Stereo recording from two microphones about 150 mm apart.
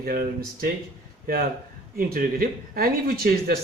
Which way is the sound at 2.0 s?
75° right (ahead or behind).